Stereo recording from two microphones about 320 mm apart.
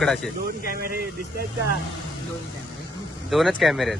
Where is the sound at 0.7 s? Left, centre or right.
Right.